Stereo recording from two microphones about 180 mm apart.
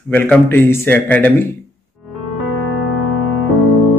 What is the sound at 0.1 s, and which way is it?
Speech, 10° left (ahead or behind).